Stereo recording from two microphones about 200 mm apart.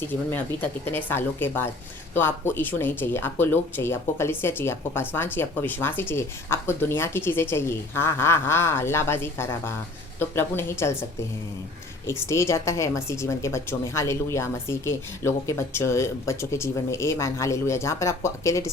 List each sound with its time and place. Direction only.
0.1 s speech: 10° left (ahead or behind)
12.0 s speech: 15° left (ahead or behind)